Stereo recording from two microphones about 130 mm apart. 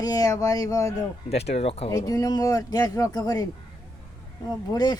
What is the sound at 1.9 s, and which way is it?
Speech, 30° left (ahead or behind).